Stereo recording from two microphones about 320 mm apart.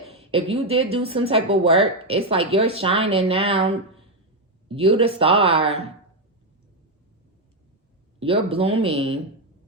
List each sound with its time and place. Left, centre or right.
0.1 s speech: centre
4.7 s speech: centre
8.2 s speech: centre